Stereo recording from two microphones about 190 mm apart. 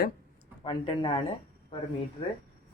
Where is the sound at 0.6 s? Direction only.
25° left (ahead or behind).